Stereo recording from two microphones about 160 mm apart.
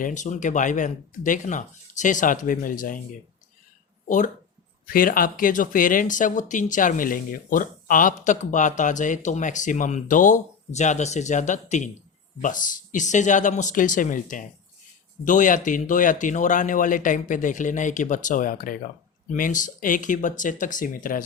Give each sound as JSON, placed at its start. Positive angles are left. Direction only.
{"t": 0.0, "sound": "speech", "side_deg": 50}
{"t": 4.9, "sound": "speech", "side_deg": 65}